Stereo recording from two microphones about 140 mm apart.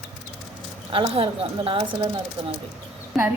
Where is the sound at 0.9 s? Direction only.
40° right (ahead or behind).